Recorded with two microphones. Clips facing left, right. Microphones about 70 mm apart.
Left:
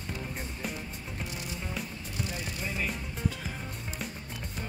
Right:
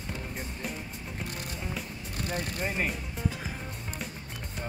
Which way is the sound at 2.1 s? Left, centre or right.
Right.